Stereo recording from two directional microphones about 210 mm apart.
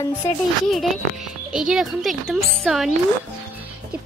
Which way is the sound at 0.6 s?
Centre (ahead or behind).